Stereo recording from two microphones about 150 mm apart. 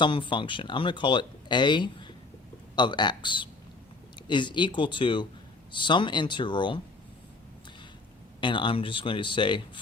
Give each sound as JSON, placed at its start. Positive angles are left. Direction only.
{"t": 0.0, "sound": "speech", "side_deg": 30}
{"t": 8.4, "sound": "speech", "side_deg": 35}